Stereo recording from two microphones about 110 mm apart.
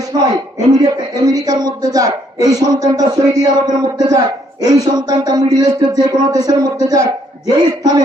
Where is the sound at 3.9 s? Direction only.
35° right (ahead or behind).